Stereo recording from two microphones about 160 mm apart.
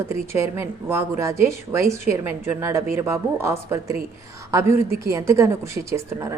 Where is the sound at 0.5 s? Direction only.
15° right (ahead or behind).